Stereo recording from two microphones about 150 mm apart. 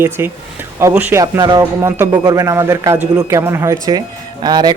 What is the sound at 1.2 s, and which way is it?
A man's voice, 25° right (ahead or behind).